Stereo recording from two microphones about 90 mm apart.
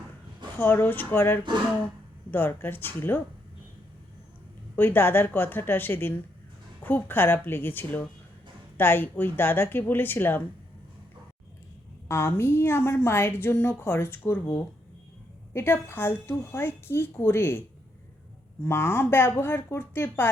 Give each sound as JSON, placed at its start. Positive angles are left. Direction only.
{"t": 0.6, "sound": "a woman's voice", "side_deg": 20}
{"t": 4.8, "sound": "a woman's voice", "side_deg": 25}
{"t": 12.0, "sound": "a woman's voice", "side_deg": 30}
{"t": 18.6, "sound": "a woman's voice", "side_deg": 30}